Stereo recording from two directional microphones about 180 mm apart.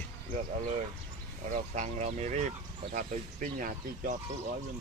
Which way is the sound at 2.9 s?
50° right (ahead or behind).